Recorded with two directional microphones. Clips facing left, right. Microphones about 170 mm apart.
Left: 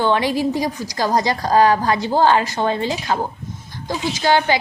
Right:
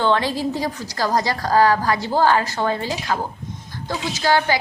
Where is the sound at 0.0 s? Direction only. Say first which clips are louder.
Left 2 dB; 15° left (ahead or behind).